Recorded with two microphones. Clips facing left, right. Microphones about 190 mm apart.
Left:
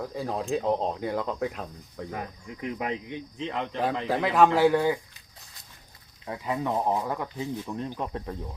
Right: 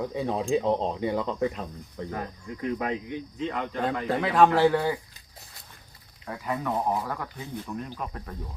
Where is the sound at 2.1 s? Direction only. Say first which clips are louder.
Right 2 dB; 20° left (ahead or behind).